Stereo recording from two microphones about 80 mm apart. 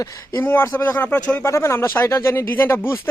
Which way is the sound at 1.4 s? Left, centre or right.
Left.